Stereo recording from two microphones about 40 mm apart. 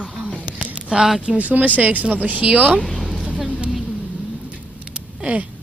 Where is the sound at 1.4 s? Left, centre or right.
Right.